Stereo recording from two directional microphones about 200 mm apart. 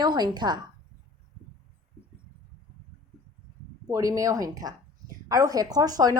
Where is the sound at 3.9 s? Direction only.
15° right (ahead or behind).